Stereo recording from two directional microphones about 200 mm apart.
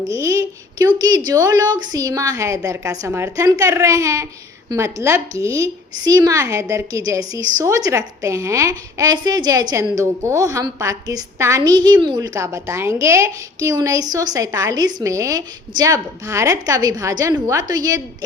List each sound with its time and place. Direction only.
0.0 s a woman's voice: 15° right (ahead or behind)